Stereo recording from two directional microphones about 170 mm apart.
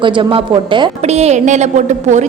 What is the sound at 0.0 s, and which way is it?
A woman's voice, 30° right (ahead or behind).